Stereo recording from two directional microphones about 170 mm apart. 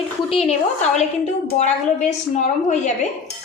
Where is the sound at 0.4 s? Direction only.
40° left (ahead or behind).